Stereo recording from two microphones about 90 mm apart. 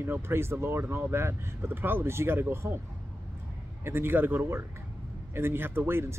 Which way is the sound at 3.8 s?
25° right (ahead or behind).